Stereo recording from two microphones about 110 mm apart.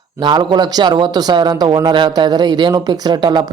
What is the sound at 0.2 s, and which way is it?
Speech, 40° right (ahead or behind).